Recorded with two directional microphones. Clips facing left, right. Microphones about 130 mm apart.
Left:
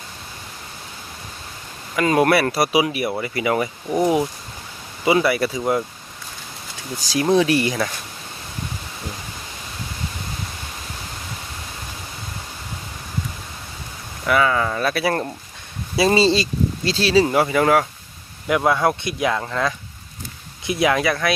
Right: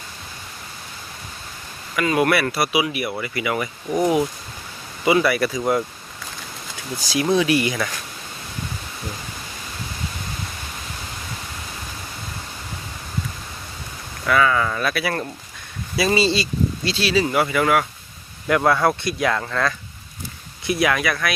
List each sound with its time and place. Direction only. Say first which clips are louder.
2.0 s speech: left 2 dB; 35° left (ahead or behind)
3.8 s speech: even; 5° left (ahead or behind)
5.0 s speech: even; 25° left (ahead or behind)
7.1 s speech: left 2 dB; 35° left (ahead or behind)
14.3 s speech: even; 25° left (ahead or behind)
18.4 s speech: even; 15° left (ahead or behind)